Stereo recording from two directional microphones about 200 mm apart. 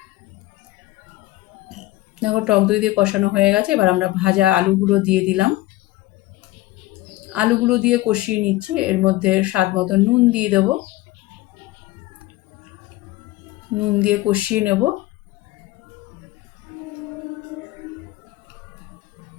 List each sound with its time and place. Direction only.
1.6 s speech: 5° right (ahead or behind)
7.1 s speech: 5° right (ahead or behind)
13.7 s speech: 5° right (ahead or behind)